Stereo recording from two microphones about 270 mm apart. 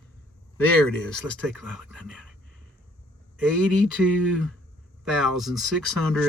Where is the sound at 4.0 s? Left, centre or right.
Centre.